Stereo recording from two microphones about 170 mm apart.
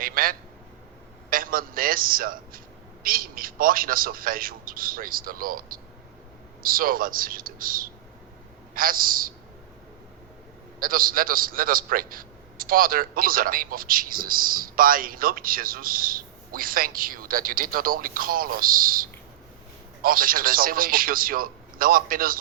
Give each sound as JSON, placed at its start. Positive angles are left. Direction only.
{"t": 0.0, "sound": "a sound", "side_deg": -55}
{"t": 3.0, "sound": "a man's voice", "side_deg": -55}
{"t": 10.8, "sound": "a man's voice", "side_deg": -55}